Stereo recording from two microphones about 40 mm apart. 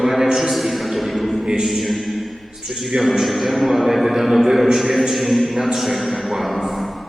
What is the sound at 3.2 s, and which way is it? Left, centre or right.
A man's voice, centre.